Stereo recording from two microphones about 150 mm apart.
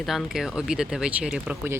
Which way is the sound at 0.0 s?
Centre (ahead or behind).